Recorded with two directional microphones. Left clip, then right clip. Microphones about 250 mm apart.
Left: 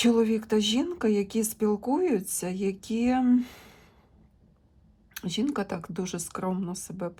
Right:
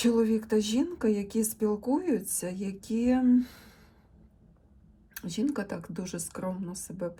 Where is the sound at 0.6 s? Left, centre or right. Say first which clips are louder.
Left 2 dB; centre.